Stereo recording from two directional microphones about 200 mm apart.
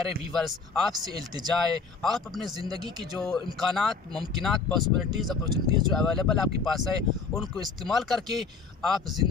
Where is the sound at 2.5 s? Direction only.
20° right (ahead or behind).